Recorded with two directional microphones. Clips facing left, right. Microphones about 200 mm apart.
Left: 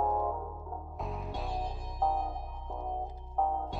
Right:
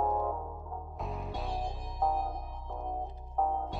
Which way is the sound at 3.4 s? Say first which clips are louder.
Even; centre (ahead or behind).